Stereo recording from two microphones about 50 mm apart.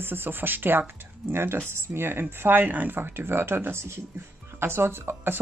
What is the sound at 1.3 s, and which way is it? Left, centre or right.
Speech, right.